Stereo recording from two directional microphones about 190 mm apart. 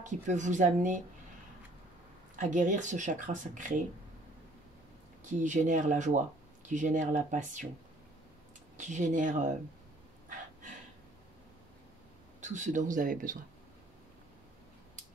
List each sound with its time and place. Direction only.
0.0 s speech: 40° right (ahead or behind)
2.3 s speech: 45° right (ahead or behind)
5.2 s speech: 40° right (ahead or behind)
8.7 s speech: 40° right (ahead or behind)
12.4 s speech: 40° right (ahead or behind)